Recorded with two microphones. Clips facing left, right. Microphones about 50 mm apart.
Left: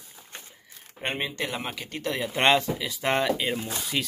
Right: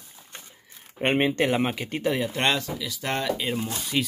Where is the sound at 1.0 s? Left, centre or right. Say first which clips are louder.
Right 8 dB; right.